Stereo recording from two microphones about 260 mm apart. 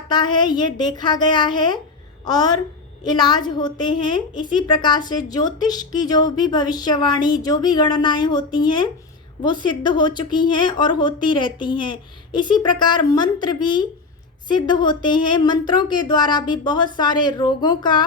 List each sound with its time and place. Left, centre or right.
0.1 s a woman's voice: centre